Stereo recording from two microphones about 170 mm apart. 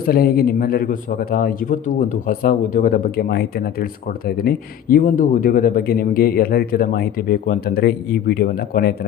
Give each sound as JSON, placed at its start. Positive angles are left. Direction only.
{"t": 0.0, "sound": "speech", "side_deg": 60}